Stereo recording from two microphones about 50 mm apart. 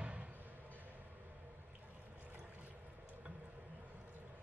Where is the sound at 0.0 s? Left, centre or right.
Right.